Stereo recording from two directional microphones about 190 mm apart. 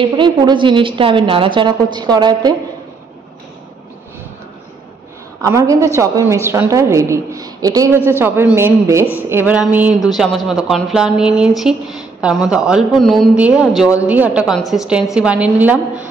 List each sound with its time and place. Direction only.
0.0 s a woman's voice: 25° right (ahead or behind)
5.4 s a woman's voice: 15° right (ahead or behind)